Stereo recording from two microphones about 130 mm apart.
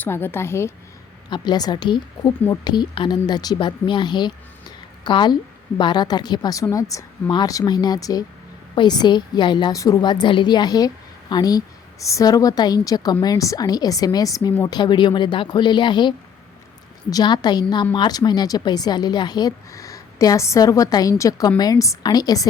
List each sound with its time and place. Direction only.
0.0 s a woman's voice: 15° left (ahead or behind)
1.3 s a woman's voice: 30° left (ahead or behind)